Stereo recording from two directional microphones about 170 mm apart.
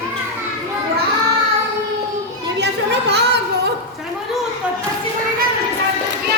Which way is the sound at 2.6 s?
80° right.